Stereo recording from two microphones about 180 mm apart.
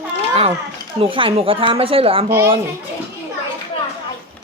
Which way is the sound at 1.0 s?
30° right (ahead or behind).